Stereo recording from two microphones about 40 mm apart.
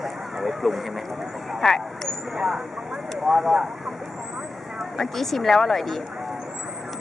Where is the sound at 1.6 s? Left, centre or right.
Centre.